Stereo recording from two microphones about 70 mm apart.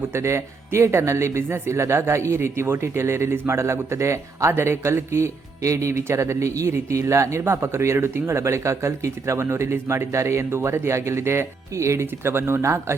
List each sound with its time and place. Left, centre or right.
0.1 s speech: right